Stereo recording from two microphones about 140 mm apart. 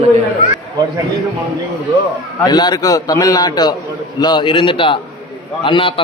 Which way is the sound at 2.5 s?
30° left (ahead or behind).